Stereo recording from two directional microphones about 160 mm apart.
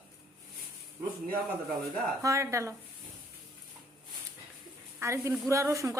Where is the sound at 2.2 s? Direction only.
20° right (ahead or behind).